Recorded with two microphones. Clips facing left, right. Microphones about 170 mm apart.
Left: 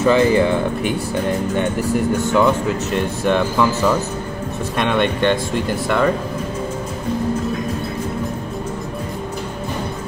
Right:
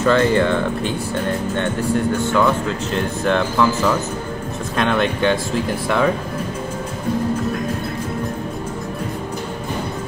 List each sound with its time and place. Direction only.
0.0 s speech: 10° left (ahead or behind)